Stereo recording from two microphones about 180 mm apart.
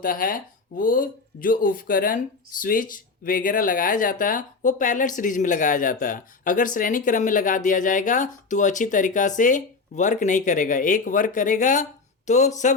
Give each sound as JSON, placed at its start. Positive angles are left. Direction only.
{"t": 0.0, "sound": "speech", "side_deg": 50}